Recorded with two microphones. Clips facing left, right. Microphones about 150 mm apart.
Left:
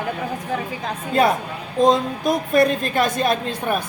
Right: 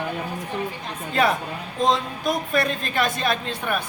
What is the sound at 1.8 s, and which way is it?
A woman's voice, 40° left (ahead or behind).